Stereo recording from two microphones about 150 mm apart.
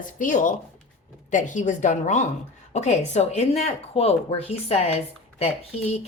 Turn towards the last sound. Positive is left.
turn(degrees=45)  # may be behind; listen again after turning